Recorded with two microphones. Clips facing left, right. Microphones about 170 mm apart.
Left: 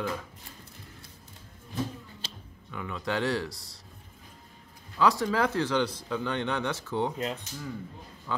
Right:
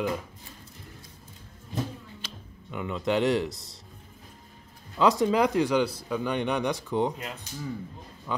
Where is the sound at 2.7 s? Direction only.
20° right (ahead or behind).